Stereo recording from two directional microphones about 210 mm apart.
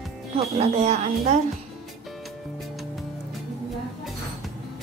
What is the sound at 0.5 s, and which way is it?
Speech, 30° right (ahead or behind).